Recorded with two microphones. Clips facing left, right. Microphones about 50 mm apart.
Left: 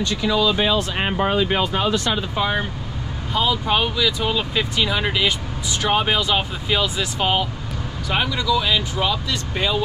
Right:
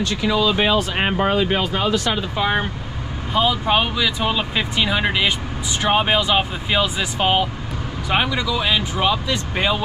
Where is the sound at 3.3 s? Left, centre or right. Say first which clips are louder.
Right 2 dB; centre.